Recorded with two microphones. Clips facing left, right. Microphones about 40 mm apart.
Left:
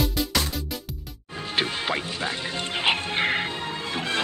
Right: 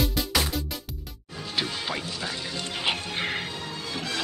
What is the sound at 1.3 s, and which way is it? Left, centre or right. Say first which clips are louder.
Music: left 4 dB; left.